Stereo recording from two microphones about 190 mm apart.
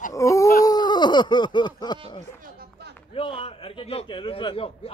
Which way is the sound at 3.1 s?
30° left (ahead or behind).